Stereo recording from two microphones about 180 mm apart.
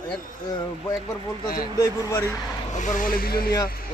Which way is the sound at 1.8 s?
20° left (ahead or behind).